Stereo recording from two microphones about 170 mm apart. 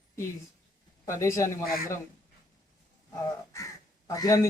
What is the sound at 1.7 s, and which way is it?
Speech, 60° left (ahead or behind).